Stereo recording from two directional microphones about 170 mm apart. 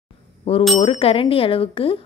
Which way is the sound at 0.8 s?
35° left (ahead or behind).